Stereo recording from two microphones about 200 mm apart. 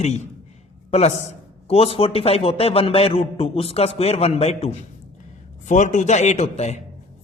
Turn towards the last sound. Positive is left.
turn(degrees=35)  # may be behind; listen again after turning